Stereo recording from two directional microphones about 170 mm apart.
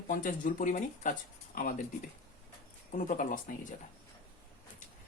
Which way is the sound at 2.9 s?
50° left (ahead or behind).